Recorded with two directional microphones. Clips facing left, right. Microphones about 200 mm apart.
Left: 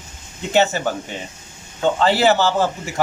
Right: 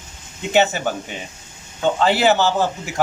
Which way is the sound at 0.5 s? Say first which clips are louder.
Even; 15° right (ahead or behind).